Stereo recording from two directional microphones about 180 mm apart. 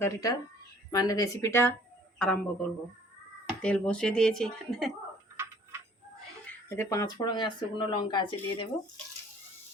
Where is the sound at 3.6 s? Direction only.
5° left (ahead or behind).